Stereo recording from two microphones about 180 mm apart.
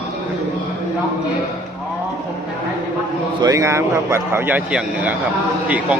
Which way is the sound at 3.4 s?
20° right (ahead or behind).